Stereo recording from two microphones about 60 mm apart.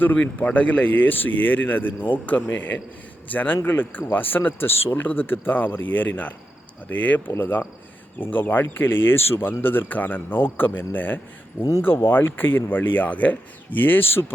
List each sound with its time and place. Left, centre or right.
0.2 s speech: left